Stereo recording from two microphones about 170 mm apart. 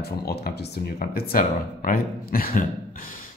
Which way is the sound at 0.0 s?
70° left (ahead or behind).